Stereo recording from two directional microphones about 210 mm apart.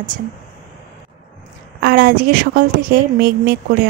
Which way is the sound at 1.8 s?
45° right (ahead or behind).